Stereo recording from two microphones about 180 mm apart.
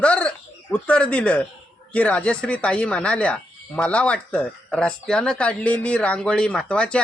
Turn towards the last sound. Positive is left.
turn(degrees=5)  # may be behind; listen again after turning